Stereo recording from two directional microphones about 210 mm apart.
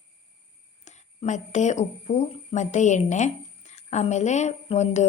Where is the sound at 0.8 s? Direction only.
35° left (ahead or behind).